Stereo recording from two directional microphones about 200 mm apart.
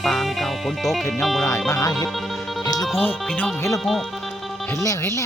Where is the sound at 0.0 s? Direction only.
Centre (ahead or behind).